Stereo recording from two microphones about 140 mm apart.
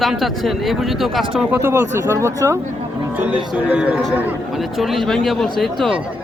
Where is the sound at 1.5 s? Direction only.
15° right (ahead or behind).